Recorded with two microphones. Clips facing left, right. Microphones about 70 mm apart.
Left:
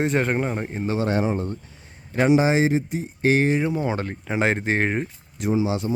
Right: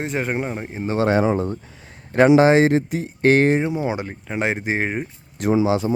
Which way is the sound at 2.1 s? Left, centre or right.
Right.